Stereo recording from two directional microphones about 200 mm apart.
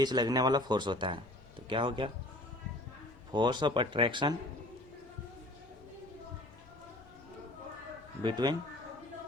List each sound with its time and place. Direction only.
0.0 s speech: 20° right (ahead or behind)
3.3 s speech: 20° right (ahead or behind)
8.2 s speech: 20° right (ahead or behind)